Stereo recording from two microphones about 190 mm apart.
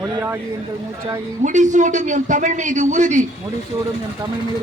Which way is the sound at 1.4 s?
40° right (ahead or behind).